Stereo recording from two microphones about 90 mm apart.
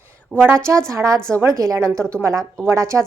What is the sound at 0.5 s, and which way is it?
A woman's voice, 30° right (ahead or behind).